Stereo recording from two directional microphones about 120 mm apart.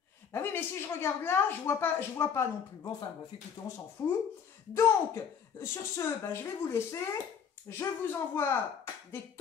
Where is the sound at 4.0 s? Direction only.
20° left (ahead or behind).